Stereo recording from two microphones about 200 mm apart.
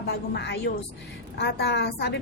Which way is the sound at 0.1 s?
60° left (ahead or behind).